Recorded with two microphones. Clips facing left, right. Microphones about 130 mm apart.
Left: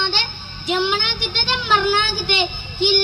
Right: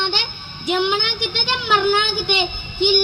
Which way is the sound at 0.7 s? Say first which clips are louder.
Right 1 dB; 15° right (ahead or behind).